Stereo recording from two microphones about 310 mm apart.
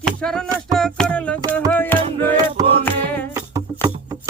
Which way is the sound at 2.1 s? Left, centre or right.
Centre.